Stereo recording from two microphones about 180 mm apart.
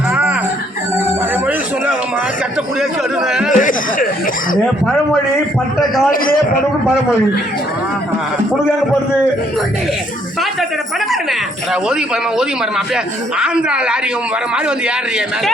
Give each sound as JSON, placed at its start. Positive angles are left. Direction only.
{"t": 0.1, "sound": "a sound", "side_deg": -5}
{"t": 3.2, "sound": "speech", "side_deg": -5}
{"t": 3.6, "sound": "speech", "side_deg": 50}
{"t": 6.1, "sound": "a man's voice", "side_deg": 50}
{"t": 11.1, "sound": "speech", "side_deg": 0}